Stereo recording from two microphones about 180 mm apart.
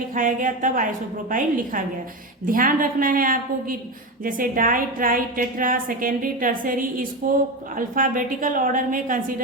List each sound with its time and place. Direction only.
0.1 s a woman's voice: 50° right (ahead or behind)